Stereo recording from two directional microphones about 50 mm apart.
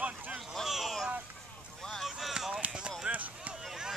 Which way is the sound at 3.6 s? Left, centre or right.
Centre.